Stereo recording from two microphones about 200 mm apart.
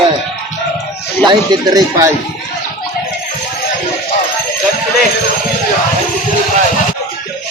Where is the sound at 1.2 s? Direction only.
20° right (ahead or behind).